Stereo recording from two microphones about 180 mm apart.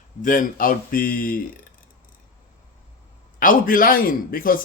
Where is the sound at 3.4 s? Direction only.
50° left (ahead or behind).